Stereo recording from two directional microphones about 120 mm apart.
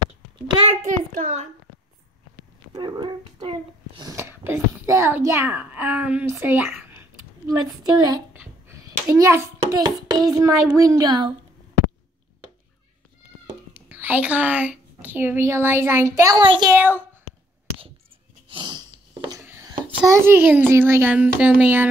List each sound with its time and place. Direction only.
0.7 s a child's voice: 90° right
2.7 s a child's voice: 35° right (ahead or behind)
4.1 s a child's voice: 20° right (ahead or behind)
7.4 s a woman's voice: 35° right (ahead or behind)
8.3 s a child's voice: 20° right (ahead or behind); by 11.3 s 40° right (ahead or behind)
13.8 s a woman's voice: 15° right (ahead or behind)
16.3 s a woman's voice: 40° right (ahead or behind)
18.5 s a sound: 40° right (ahead or behind)
20.1 s speech: 20° right (ahead or behind)